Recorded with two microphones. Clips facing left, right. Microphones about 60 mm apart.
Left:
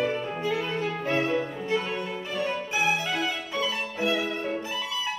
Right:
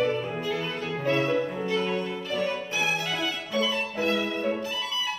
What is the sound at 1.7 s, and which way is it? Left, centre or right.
Music, centre.